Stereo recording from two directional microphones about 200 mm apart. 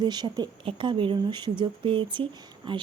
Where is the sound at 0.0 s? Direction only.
20° right (ahead or behind).